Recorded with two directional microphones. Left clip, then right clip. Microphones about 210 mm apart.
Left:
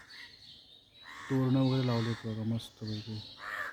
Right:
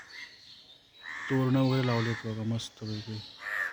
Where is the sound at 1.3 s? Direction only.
5° right (ahead or behind).